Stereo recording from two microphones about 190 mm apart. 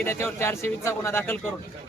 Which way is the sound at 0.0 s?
15° left (ahead or behind).